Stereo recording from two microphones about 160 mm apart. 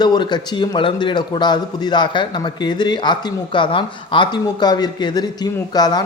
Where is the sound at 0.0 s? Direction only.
25° left (ahead or behind).